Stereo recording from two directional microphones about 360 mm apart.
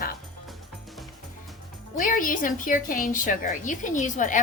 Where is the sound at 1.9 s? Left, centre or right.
Left.